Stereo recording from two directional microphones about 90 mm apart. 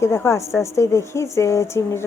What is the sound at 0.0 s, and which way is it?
A woman's voice, 30° left (ahead or behind).